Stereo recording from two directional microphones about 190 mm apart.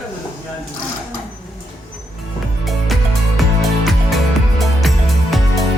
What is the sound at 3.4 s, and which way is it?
Music, centre (ahead or behind).